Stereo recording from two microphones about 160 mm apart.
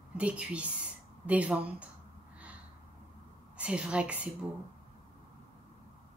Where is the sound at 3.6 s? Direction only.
5° right (ahead or behind).